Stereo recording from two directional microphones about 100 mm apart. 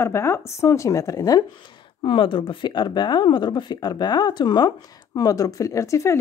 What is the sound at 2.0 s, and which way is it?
Speech, 60° left (ahead or behind).